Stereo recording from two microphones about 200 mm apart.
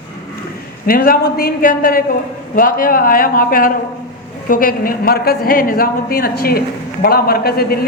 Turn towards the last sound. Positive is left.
turn(degrees=50)  # may be behind; listen again after turning